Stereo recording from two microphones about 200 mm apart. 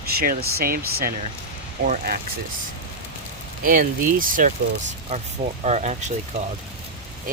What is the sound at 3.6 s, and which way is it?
Speech, 45° right (ahead or behind).